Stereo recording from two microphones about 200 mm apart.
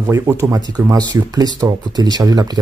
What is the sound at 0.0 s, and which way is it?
Speech, 15° right (ahead or behind).